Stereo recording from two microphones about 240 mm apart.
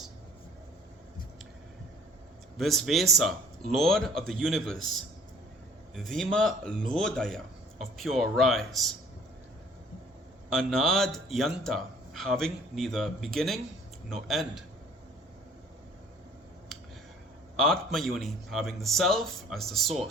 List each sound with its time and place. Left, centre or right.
2.6 s a man's voice: centre
5.9 s a man's voice: centre
10.5 s a man's voice: centre
17.6 s a man's voice: centre